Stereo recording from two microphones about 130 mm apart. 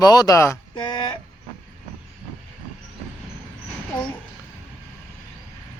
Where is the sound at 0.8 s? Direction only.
35° left (ahead or behind).